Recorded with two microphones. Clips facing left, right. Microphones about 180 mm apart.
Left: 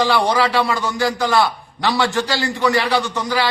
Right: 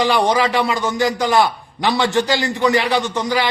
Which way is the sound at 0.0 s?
15° right (ahead or behind).